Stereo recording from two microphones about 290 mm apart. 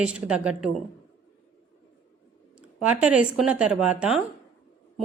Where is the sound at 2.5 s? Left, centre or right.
Centre.